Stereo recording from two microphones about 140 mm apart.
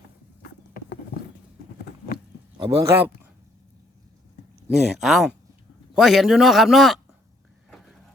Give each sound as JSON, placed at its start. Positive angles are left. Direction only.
{"t": 2.6, "sound": "speech", "side_deg": -15}
{"t": 4.7, "sound": "a man's voice", "side_deg": 0}